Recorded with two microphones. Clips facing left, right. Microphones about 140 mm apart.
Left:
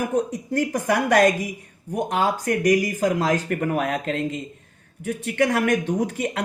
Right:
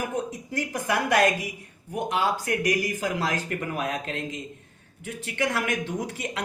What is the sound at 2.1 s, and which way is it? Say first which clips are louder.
Speech: left 3 dB; 50° left (ahead or behind).